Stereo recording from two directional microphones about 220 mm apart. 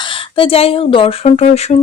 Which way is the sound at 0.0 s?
25° left (ahead or behind).